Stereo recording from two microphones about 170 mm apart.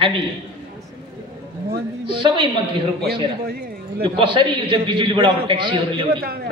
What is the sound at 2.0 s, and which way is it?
Speech, 30° right (ahead or behind).